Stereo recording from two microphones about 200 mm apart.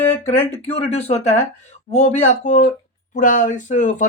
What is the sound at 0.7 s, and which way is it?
Speech, 30° left (ahead or behind).